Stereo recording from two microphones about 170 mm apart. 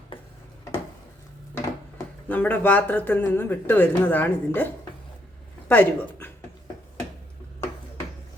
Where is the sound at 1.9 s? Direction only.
10° left (ahead or behind).